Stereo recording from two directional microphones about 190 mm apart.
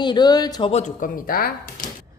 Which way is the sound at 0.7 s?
40° left (ahead or behind).